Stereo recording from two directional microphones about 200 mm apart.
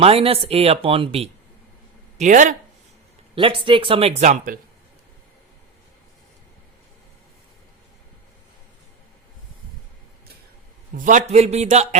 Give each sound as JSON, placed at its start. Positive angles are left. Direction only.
{"t": 0.0, "sound": "speech", "side_deg": -30}
{"t": 2.1, "sound": "speech", "side_deg": -40}
{"t": 3.3, "sound": "speech", "side_deg": -25}
{"t": 10.9, "sound": "speech", "side_deg": -40}